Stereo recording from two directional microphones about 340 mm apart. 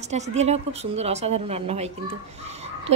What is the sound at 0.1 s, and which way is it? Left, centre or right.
A woman's voice, centre.